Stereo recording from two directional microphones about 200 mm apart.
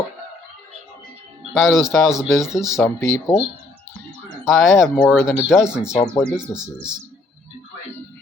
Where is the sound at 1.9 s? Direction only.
Centre (ahead or behind).